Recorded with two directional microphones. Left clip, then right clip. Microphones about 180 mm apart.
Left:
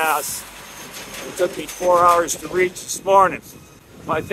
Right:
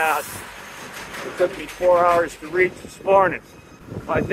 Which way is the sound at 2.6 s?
25° left (ahead or behind).